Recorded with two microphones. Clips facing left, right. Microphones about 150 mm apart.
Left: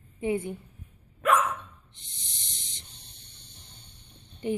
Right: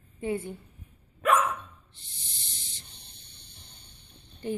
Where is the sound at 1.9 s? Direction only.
20° left (ahead or behind).